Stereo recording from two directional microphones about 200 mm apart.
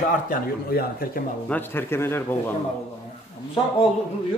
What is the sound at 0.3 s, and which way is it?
Speech, 50° left (ahead or behind).